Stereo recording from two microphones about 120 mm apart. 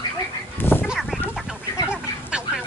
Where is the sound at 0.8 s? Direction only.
Centre (ahead or behind).